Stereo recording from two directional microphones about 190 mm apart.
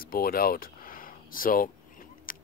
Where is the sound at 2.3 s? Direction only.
45° left (ahead or behind).